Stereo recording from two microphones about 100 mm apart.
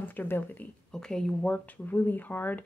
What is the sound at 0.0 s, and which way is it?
Speech, 20° left (ahead or behind).